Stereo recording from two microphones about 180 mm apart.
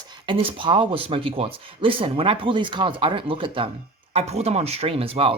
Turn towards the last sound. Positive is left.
turn(degrees=-30)  # may be behind; listen again after turning